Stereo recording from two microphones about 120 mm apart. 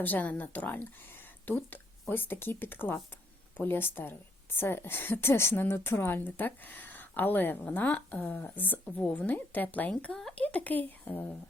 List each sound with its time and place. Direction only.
0.0 s a woman's voice: 15° left (ahead or behind)